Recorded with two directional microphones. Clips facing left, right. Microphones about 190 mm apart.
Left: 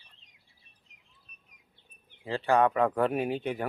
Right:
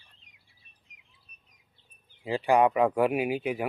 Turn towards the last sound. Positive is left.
turn(degrees=-5)  # may be behind; listen again after turning